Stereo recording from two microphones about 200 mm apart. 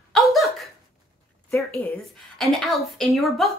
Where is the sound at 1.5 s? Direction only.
10° left (ahead or behind).